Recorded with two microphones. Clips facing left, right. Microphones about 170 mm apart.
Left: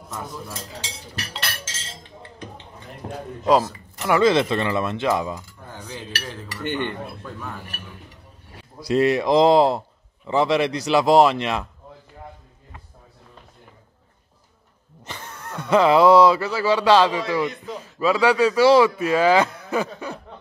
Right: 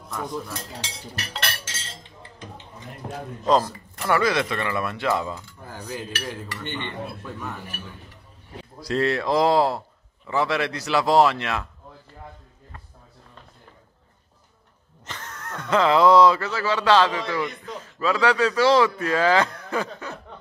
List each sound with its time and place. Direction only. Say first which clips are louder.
3.4 s speech: left 2 dB; 10° left (ahead or behind)
4.2 s speech: left 5 dB; 25° left (ahead or behind)
5.9 s dishes: right 2 dB; 10° right (ahead or behind)
6.5 s a man's voice: left 6 dB; 5° left (ahead or behind)
8.8 s a man's voice: left 4 dB; 15° left (ahead or behind)
15.0 s a man's voice: left 1 dB; 10° left (ahead or behind)